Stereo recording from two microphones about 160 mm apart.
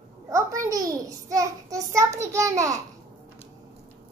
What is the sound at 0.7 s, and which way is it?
A child's voice, 20° right (ahead or behind).